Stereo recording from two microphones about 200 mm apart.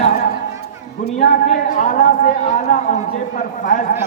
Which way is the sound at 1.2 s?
40° left (ahead or behind).